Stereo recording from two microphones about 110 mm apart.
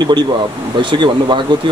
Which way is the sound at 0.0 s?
40° right (ahead or behind).